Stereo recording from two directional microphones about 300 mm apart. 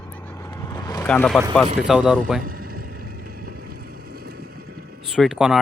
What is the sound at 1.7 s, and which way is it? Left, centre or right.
Speech, centre.